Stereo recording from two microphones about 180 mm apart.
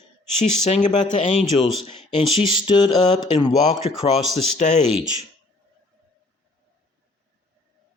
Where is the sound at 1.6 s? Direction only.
25° left (ahead or behind).